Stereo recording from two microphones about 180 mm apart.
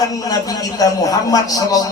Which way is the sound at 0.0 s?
20° left (ahead or behind).